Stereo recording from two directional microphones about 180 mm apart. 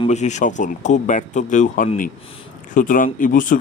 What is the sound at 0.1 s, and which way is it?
Speech, 40° left (ahead or behind).